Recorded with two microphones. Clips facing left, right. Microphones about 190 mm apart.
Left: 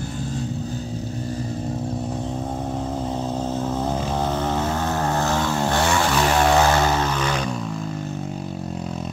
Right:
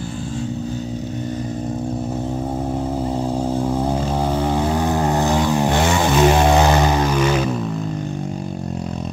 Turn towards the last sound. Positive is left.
turn(degrees=-5)  # may be behind; listen again after turning